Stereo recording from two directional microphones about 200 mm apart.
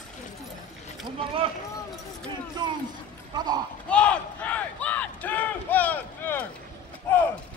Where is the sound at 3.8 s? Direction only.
5° left (ahead or behind).